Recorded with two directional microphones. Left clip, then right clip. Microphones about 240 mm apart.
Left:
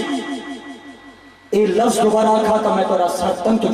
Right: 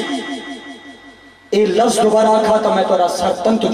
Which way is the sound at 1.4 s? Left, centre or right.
Centre.